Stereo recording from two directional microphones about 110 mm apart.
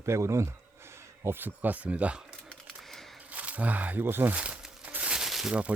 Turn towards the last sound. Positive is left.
turn(degrees=-10)  # may be behind; listen again after turning